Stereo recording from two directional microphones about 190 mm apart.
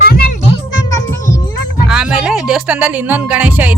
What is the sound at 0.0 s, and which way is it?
Music, 55° left (ahead or behind).